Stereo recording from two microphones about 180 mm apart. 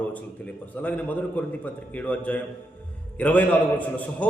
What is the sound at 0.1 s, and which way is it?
A man's voice, 10° left (ahead or behind).